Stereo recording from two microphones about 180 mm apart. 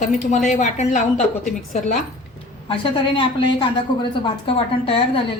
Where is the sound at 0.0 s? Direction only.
40° left (ahead or behind).